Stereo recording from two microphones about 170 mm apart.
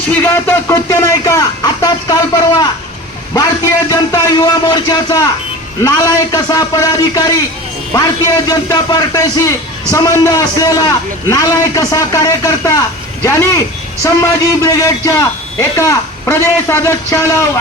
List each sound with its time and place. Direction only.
0.1 s a man's voice: 15° left (ahead or behind)
14.0 s a man's voice: 20° left (ahead or behind)